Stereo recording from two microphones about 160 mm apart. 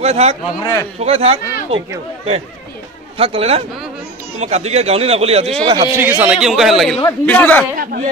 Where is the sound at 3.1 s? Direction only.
35° right (ahead or behind).